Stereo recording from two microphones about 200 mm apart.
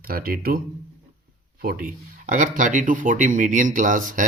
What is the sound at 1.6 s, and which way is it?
Speech, 50° right (ahead or behind).